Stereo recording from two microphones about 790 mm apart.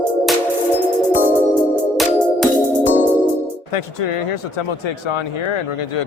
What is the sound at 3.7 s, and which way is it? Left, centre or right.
Speech, left.